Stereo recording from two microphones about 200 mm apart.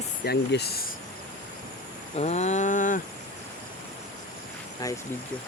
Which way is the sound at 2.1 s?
35° left (ahead or behind).